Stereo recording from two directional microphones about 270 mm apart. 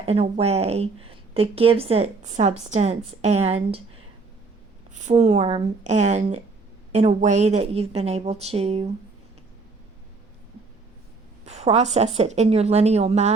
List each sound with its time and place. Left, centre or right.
0.0 s a woman's voice: right
4.9 s a woman's voice: right
11.4 s a woman's voice: right